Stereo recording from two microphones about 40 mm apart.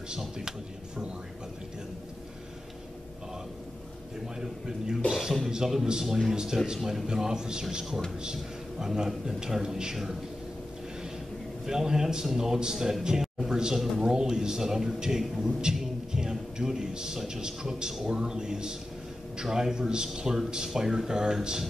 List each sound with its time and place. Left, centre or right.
0.2 s a man's voice: centre
4.4 s a man's voice: centre
11.6 s a man's voice: centre